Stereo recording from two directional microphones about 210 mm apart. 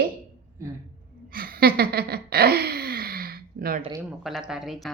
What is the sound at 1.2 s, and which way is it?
Gasp, 45° right (ahead or behind).